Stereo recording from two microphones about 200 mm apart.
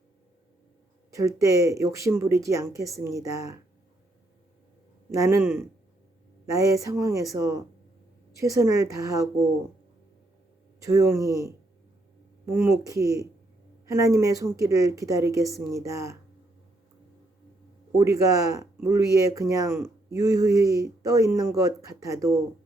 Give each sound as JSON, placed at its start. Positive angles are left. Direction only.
{"t": 1.1, "sound": "speech", "side_deg": -15}
{"t": 5.1, "sound": "speech", "side_deg": -15}
{"t": 10.8, "sound": "speech", "side_deg": -15}
{"t": 17.9, "sound": "speech", "side_deg": -15}